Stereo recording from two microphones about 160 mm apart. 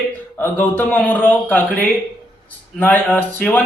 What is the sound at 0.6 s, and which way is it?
A man's voice, 10° left (ahead or behind).